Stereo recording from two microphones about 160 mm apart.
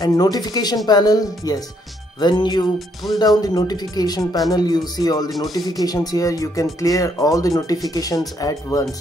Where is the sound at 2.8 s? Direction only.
Centre (ahead or behind).